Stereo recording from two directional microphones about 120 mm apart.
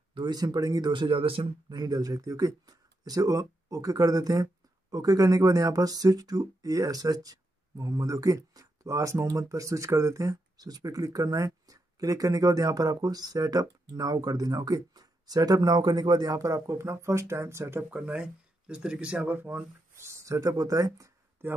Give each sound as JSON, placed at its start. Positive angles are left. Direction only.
{"t": 0.1, "sound": "speech", "side_deg": -40}
{"t": 1.8, "sound": "speech", "side_deg": -35}